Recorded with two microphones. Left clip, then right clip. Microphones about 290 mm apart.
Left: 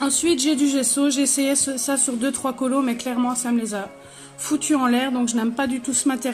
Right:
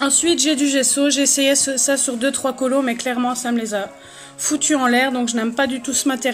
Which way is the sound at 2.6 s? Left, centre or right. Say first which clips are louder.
Right 4 dB; right.